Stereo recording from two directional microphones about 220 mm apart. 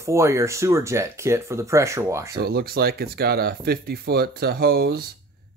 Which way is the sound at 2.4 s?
45° right (ahead or behind).